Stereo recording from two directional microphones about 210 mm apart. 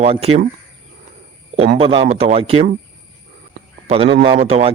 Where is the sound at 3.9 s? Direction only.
25° right (ahead or behind).